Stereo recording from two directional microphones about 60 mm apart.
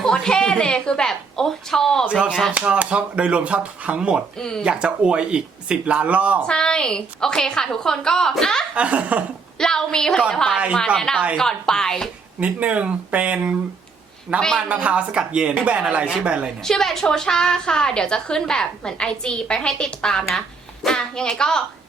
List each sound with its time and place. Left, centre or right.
0.0 s a woman's voice: centre
2.0 s speech: centre
4.4 s a woman's voice: centre
4.6 s speech: centre
6.5 s a woman's voice: centre
8.7 s speech: centre
9.6 s a woman's voice: centre
12.4 s speech: right
16.6 s a woman's voice: centre